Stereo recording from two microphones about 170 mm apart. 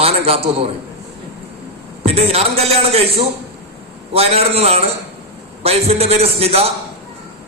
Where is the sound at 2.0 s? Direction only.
35° right (ahead or behind).